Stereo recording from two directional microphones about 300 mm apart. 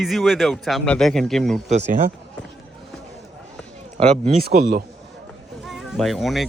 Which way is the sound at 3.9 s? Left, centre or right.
Right.